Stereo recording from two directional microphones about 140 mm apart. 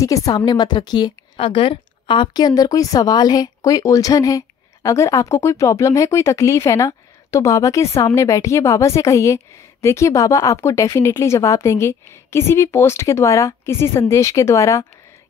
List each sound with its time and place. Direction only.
0.0 s a woman's voice: 25° left (ahead or behind)